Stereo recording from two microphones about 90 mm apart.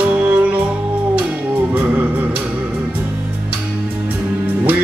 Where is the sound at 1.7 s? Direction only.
20° right (ahead or behind).